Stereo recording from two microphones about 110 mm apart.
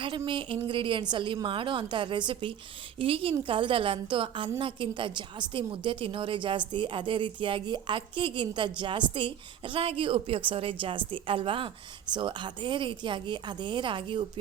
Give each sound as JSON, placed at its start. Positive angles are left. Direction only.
{"t": 0.0, "sound": "a woman's voice", "side_deg": -50}